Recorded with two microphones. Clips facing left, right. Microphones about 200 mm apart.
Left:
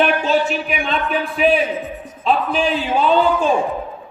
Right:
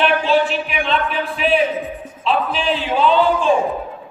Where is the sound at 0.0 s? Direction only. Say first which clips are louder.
Even; 45° left (ahead or behind).